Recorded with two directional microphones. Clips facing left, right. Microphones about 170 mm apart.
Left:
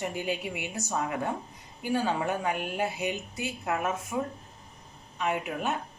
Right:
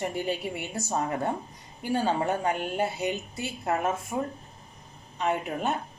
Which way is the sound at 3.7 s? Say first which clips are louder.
Right 3 dB; 35° right (ahead or behind).